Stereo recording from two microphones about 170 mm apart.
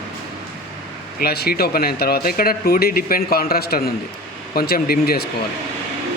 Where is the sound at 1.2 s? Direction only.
65° left (ahead or behind).